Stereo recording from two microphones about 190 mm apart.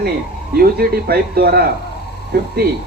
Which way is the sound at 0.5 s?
50° right (ahead or behind).